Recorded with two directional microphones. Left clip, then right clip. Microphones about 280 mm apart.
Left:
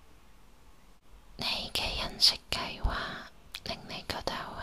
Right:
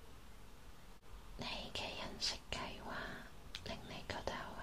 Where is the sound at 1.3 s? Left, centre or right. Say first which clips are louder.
Left 12 dB; left.